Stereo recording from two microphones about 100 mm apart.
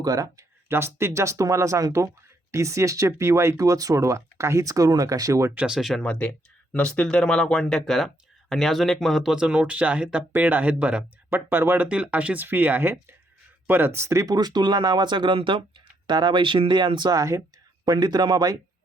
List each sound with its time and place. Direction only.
0.0 s speech: 40° right (ahead or behind)
0.7 s speech: 25° right (ahead or behind)
5.5 s speech: 10° right (ahead or behind)
6.0 s speech: 10° left (ahead or behind); by 17.2 s 50° right (ahead or behind)
17.2 s speech: 35° right (ahead or behind)